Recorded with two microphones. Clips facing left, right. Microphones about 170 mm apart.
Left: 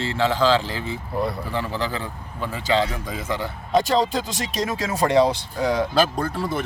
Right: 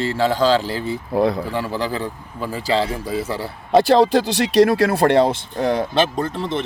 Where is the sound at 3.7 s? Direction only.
70° right (ahead or behind).